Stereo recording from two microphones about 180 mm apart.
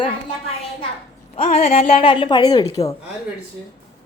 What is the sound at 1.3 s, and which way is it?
Speech, 35° left (ahead or behind).